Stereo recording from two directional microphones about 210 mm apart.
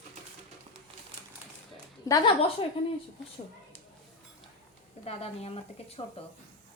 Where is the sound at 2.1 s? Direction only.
25° left (ahead or behind).